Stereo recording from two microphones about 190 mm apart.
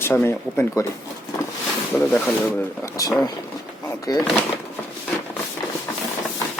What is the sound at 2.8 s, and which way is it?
Speech, 20° left (ahead or behind).